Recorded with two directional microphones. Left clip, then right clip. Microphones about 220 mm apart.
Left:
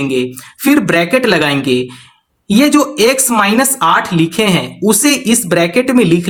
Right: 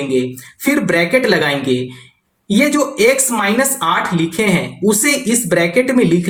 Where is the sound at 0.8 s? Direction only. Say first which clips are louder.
Even; 35° left (ahead or behind).